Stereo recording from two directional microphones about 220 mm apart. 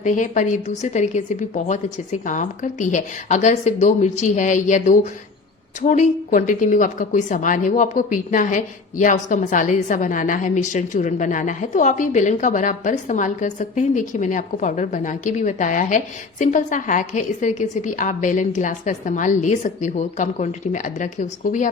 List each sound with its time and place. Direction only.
0.0 s a woman's voice: 35° left (ahead or behind)